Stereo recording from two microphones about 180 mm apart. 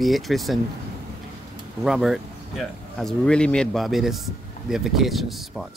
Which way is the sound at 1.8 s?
Centre (ahead or behind).